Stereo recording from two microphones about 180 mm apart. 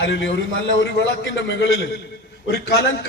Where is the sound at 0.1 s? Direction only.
90° left.